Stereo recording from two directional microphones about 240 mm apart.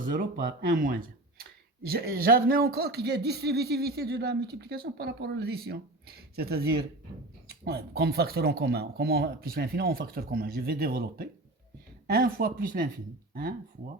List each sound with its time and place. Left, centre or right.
0.0 s speech: right